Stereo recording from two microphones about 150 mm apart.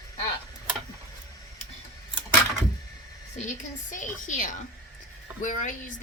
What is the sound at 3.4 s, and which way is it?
A woman's voice, 55° left (ahead or behind).